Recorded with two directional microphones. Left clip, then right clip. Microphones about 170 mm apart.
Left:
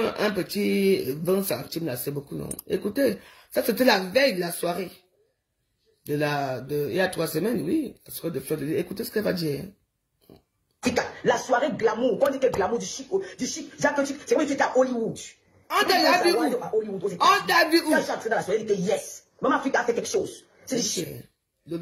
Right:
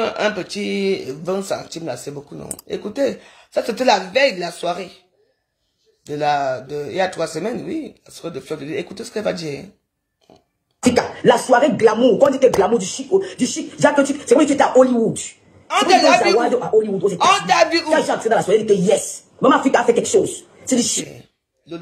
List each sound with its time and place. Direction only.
0.0 s speech: 75° left (ahead or behind)
2.2 s speech: 30° left (ahead or behind)
2.9 s speech: 75° left (ahead or behind)
6.0 s speech: 80° left
10.8 s speech: 45° right (ahead or behind)
15.7 s speech: 80° left
16.5 s speech: 45° right (ahead or behind)
17.3 s speech: 75° left (ahead or behind)
17.9 s speech: 45° right (ahead or behind)